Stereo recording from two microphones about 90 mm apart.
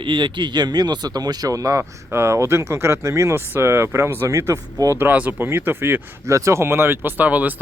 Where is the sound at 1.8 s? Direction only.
25° right (ahead or behind).